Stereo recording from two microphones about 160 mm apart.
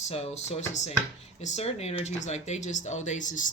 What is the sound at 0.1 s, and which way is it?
Speech, 40° left (ahead or behind).